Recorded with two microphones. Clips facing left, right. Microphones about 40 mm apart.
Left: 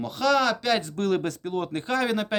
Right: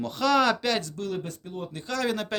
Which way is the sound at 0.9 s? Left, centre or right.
Left.